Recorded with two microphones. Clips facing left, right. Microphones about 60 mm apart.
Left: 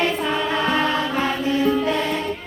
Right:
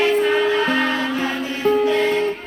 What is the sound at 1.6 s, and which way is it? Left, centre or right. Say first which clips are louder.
Music: right 5 dB; right.